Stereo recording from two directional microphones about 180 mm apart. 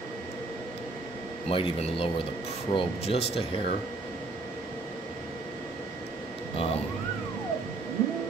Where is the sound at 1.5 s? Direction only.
30° left (ahead or behind).